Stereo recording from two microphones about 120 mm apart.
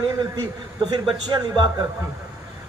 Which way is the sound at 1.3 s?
35° right (ahead or behind).